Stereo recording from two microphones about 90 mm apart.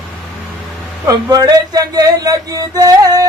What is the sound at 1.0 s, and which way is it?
Speech, 45° right (ahead or behind).